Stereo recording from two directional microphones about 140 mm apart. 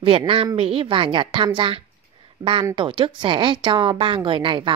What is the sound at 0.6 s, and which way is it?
Speech, 40° right (ahead or behind).